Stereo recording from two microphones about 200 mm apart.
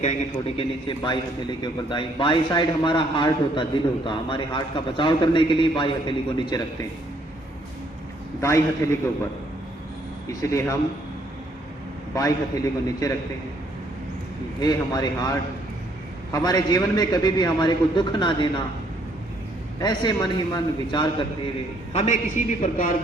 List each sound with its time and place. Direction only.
0.0 s a man's voice: 30° left (ahead or behind)
8.4 s a man's voice: 15° left (ahead or behind)
10.4 s a man's voice: 15° left (ahead or behind)
12.1 s a man's voice: 15° left (ahead or behind)
14.6 s a man's voice: 20° left (ahead or behind)
19.8 s a man's voice: 20° left (ahead or behind)
21.9 s a man's voice: 35° left (ahead or behind)